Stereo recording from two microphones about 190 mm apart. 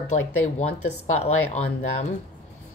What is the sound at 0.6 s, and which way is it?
Speech, 35° left (ahead or behind).